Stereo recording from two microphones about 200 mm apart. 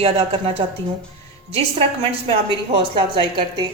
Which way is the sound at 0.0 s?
30° right (ahead or behind).